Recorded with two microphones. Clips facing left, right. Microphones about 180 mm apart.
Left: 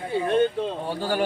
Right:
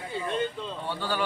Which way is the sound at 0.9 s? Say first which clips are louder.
Left 3 dB; 45° left (ahead or behind).